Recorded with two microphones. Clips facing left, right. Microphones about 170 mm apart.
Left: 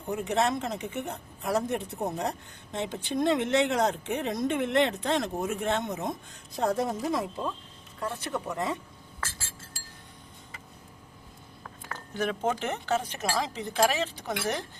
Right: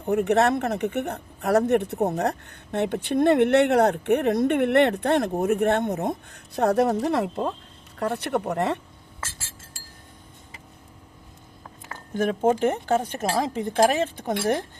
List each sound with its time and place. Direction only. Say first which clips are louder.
0.1 s speech: right 7 dB; 65° right (ahead or behind)
12.1 s speech: right 7 dB; 50° right (ahead or behind)